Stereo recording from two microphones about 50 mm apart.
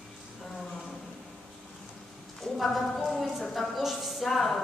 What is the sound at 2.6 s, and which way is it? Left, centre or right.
A woman's voice, centre.